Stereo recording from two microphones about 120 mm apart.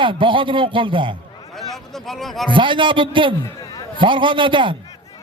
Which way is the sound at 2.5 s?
45° right (ahead or behind).